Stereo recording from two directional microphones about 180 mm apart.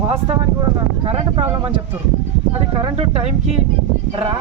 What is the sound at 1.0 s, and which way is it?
Speech, 30° right (ahead or behind).